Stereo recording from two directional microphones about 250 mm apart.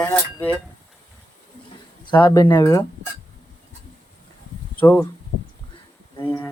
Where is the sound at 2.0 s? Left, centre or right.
Centre.